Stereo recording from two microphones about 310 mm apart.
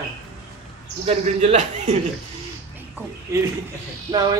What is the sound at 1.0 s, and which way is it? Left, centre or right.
Speech, right.